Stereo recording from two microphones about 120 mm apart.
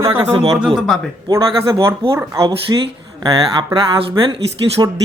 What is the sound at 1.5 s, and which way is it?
Speech, 40° right (ahead or behind).